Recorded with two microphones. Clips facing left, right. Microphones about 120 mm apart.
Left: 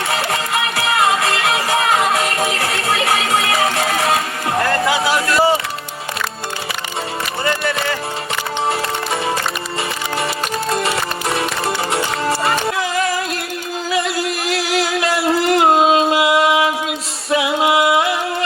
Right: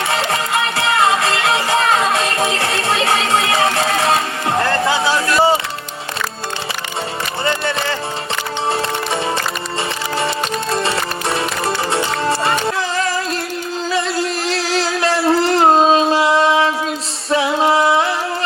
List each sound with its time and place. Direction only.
0.1 s music: 25° right (ahead or behind)
7.4 s music: 30° right (ahead or behind)
10.2 s music: 30° right (ahead or behind)